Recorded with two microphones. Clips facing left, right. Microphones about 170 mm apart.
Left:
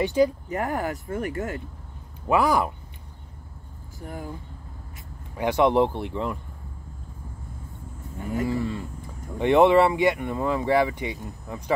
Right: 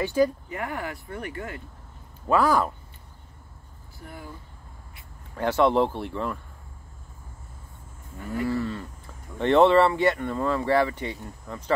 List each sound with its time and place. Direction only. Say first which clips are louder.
0.0 s speech: left 2 dB; 15° left (ahead or behind)
0.5 s speech: left 5 dB; 40° left (ahead or behind)
2.2 s speech: even; 15° left (ahead or behind)
5.3 s speech: left 1 dB; 15° left (ahead or behind)
8.5 s speech: left 1 dB; 15° left (ahead or behind)